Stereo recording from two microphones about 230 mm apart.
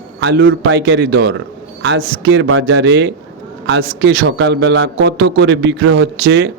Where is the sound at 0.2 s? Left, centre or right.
Right.